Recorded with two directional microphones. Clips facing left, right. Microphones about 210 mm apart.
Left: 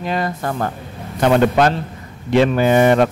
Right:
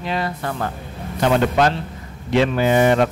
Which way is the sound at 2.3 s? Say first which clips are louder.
Left 3 dB; 50° left (ahead or behind).